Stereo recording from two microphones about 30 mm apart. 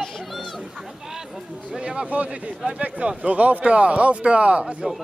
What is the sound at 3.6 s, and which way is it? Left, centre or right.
Speech, right.